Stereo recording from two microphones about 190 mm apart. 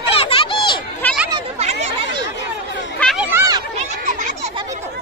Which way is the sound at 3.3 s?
15° right (ahead or behind).